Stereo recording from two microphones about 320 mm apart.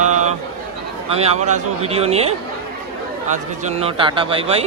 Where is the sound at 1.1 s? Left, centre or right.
Right.